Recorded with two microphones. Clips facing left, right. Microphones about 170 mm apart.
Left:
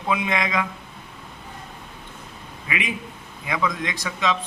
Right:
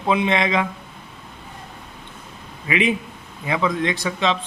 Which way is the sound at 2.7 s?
30° right (ahead or behind).